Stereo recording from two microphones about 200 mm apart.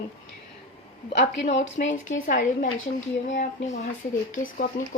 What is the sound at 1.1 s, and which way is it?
A woman's voice, 35° left (ahead or behind).